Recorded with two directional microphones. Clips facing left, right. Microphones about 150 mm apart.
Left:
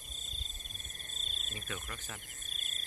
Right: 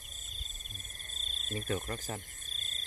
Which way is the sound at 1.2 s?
40° right (ahead or behind).